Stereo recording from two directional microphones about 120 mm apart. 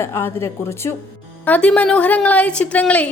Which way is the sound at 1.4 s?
10° left (ahead or behind).